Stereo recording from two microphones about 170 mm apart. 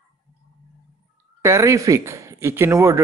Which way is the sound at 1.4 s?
15° right (ahead or behind).